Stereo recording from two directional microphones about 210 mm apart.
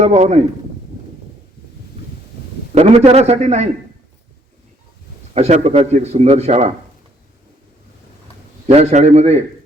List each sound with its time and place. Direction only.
0.0 s a man's voice: 30° right (ahead or behind)
2.7 s a man's voice: 30° right (ahead or behind)
5.3 s a man's voice: 30° right (ahead or behind)
8.6 s a man's voice: 30° right (ahead or behind)